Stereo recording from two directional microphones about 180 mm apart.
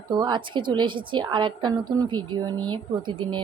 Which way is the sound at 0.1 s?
25° right (ahead or behind).